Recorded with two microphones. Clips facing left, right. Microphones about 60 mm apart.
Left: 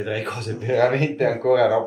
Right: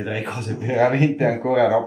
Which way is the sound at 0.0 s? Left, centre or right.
Centre.